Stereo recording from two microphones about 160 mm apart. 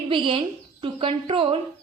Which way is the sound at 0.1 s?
35° right (ahead or behind).